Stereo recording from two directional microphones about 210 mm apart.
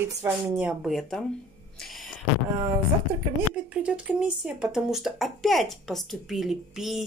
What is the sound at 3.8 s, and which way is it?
Speech, 5° right (ahead or behind).